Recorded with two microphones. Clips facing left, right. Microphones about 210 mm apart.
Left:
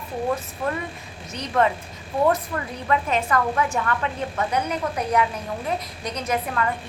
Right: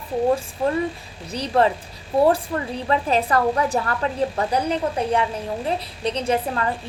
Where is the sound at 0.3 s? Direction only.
30° right (ahead or behind).